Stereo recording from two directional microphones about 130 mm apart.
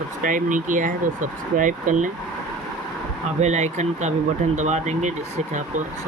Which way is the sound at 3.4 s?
65° right (ahead or behind).